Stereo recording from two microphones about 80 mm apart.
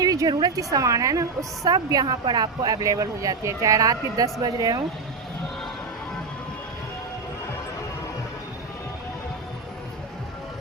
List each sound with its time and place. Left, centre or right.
0.0 s speech: right
2.2 s speech: right